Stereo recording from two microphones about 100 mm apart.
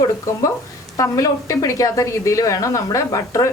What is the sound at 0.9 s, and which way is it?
A woman's voice, 35° left (ahead or behind).